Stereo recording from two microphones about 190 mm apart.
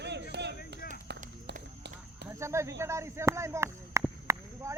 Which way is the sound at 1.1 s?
65° right (ahead or behind).